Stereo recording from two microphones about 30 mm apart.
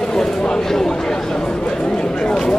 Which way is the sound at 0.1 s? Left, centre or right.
Left.